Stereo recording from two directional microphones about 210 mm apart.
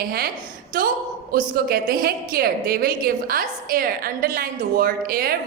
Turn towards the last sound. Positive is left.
turn(degrees=-45)  # may be behind; listen again after turning